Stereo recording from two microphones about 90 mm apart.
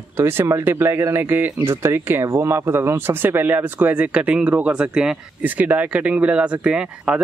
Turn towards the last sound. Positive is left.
turn(degrees=-10)  # may be behind; listen again after turning